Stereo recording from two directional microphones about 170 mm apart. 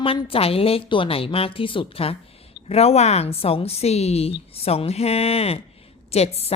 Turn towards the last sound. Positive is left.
turn(degrees=35)  # may be behind; listen again after turning